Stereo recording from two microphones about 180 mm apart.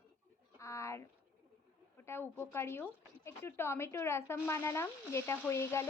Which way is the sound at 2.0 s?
15° left (ahead or behind).